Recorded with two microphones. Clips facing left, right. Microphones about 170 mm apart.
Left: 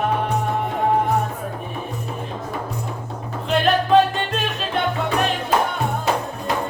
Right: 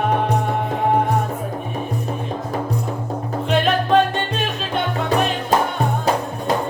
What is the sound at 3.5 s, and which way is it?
Music, centre (ahead or behind).